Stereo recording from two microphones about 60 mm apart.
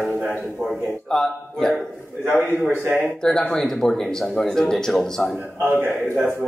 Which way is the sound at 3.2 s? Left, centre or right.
Centre.